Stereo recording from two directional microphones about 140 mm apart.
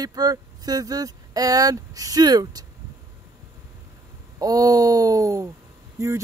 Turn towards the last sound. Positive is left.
turn(degrees=-20)  # may be behind; listen again after turning